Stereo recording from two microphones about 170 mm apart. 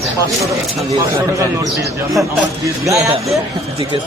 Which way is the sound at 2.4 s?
15° right (ahead or behind).